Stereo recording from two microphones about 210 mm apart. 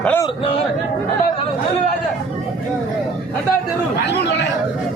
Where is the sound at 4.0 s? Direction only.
55° left (ahead or behind).